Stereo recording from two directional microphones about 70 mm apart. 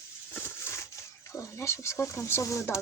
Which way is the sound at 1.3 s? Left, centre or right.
Left.